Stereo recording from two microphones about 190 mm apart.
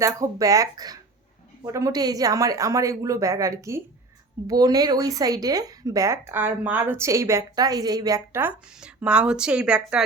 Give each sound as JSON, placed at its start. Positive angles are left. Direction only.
{"t": 0.0, "sound": "a woman's voice", "side_deg": -15}